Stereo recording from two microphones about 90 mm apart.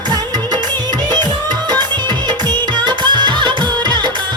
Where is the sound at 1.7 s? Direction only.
55° right (ahead or behind).